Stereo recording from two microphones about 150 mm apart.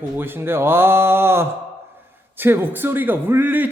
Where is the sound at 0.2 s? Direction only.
15° right (ahead or behind).